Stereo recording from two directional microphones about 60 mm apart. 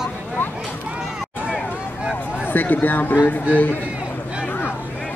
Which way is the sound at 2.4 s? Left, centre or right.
Left.